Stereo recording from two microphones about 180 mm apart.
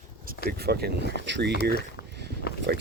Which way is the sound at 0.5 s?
60° right (ahead or behind).